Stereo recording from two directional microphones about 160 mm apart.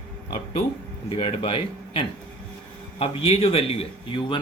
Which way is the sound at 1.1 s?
35° left (ahead or behind).